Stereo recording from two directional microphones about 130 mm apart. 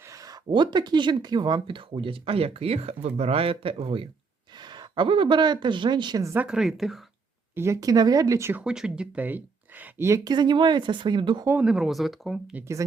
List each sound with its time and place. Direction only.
0.0 s speech: 25° right (ahead or behind); by 4.1 s 45° right (ahead or behind)
4.5 s speech: 35° right (ahead or behind)
6.2 s speech: 15° right (ahead or behind)
7.5 s speech: 20° right (ahead or behind)
8.6 s speech: 5° right (ahead or behind)
10.2 s speech: 35° right (ahead or behind)
11.4 s speech: 10° right (ahead or behind)